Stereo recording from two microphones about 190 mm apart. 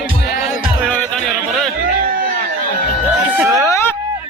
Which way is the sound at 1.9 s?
50° right (ahead or behind).